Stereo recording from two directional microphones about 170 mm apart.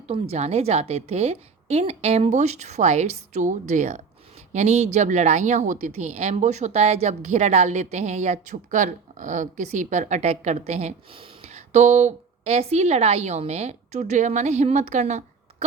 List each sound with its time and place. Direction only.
0.1 s speech: 40° right (ahead or behind)